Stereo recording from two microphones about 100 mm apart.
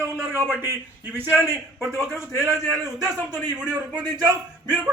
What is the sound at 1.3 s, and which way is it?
Speech, 5° left (ahead or behind).